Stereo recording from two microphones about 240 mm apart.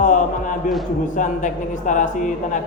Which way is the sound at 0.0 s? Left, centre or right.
Left.